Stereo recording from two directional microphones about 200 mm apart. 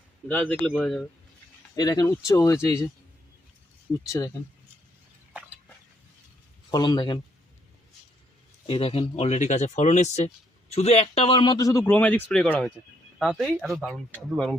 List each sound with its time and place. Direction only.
0.3 s speech: 10° left (ahead or behind)
1.7 s speech: 20° left (ahead or behind)
6.7 s speech: 20° left (ahead or behind)
8.6 s speech: 30° left (ahead or behind); by 14.5 s 5° left (ahead or behind)